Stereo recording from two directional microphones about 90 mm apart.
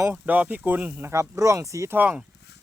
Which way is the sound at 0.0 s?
20° right (ahead or behind).